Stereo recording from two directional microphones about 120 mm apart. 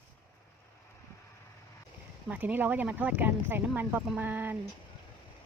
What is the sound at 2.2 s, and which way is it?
Speech, 15° right (ahead or behind).